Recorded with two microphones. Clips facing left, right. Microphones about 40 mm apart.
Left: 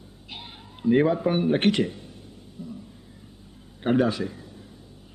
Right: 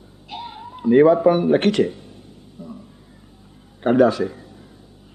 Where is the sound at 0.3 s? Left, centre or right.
Centre.